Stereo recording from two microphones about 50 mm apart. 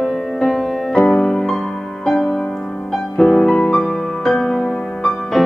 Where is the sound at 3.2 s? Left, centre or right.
Centre.